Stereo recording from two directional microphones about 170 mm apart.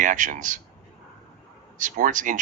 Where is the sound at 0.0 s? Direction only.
50° right (ahead or behind).